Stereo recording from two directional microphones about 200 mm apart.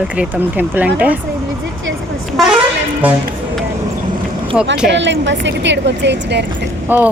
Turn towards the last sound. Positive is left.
turn(degrees=-10)  # may be behind; listen again after turning